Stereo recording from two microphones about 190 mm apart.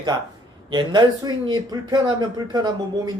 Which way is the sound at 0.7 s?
25° right (ahead or behind).